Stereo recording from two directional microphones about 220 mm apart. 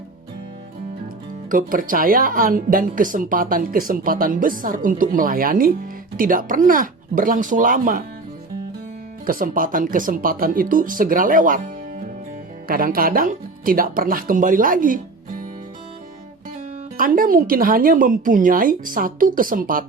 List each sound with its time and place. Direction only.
1.5 s speech: 40° right (ahead or behind)
9.2 s speech: 40° right (ahead or behind)
12.6 s speech: 40° right (ahead or behind)
17.0 s speech: 40° right (ahead or behind)